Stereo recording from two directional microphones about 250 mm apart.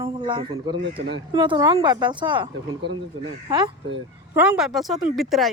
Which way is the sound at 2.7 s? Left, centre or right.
Right.